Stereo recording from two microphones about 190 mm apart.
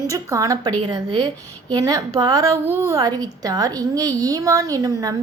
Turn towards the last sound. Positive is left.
turn(degrees=-20)  # may be behind; listen again after turning